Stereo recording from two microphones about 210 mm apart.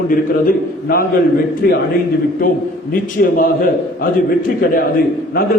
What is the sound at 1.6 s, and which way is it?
A man's voice, 45° left (ahead or behind).